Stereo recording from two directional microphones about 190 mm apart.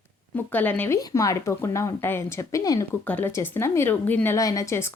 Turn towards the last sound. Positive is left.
turn(degrees=15)  # may be behind; listen again after turning